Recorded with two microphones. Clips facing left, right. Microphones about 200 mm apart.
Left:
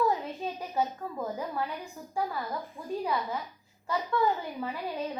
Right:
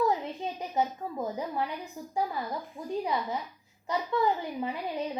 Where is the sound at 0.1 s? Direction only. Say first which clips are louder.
Right 1 dB; 20° right (ahead or behind).